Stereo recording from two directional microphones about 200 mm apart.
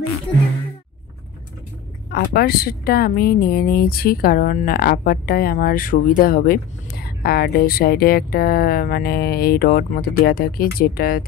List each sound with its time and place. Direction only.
2.0 s a woman's voice: 55° left (ahead or behind)